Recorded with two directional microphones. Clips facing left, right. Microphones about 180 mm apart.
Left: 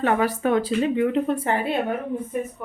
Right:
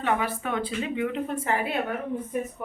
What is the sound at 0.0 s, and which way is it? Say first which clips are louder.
A woman's voice: left 6 dB; 40° left (ahead or behind).